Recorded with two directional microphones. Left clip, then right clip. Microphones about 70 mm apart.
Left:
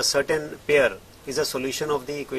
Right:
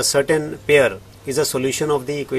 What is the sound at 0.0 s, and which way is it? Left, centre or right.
A man's voice, centre.